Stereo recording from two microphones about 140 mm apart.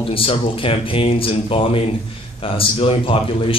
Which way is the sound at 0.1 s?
40° left (ahead or behind).